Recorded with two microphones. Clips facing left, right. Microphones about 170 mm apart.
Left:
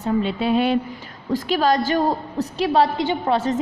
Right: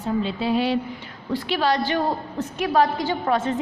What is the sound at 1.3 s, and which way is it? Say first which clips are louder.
A woman's voice: left 3 dB; 45° left (ahead or behind).